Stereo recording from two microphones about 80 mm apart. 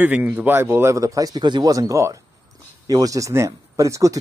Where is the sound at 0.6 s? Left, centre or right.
Right.